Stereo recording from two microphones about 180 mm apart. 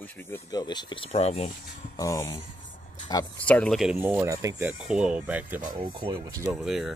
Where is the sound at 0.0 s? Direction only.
15° left (ahead or behind); by 1.5 s 35° left (ahead or behind).